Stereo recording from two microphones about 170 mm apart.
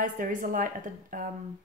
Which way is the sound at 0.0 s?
50° right (ahead or behind).